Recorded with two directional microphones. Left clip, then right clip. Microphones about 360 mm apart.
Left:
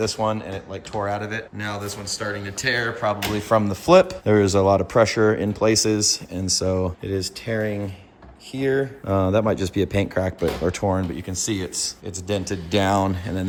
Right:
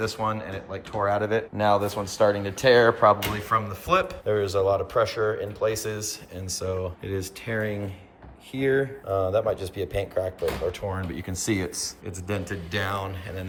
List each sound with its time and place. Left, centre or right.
0.0 s speech: centre
3.5 s speech: centre
9.3 s speech: centre
11.1 s speech: centre